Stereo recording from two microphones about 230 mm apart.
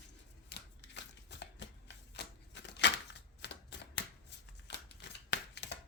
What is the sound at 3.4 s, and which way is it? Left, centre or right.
Typewriter, left.